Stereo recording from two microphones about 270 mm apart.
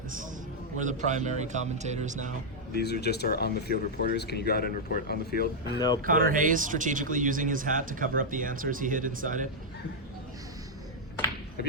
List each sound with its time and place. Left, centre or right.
0.8 s speech: right
2.7 s speech: left
5.7 s speech: centre
6.0 s speech: right